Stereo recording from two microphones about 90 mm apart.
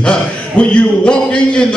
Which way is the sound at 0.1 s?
10° left (ahead or behind).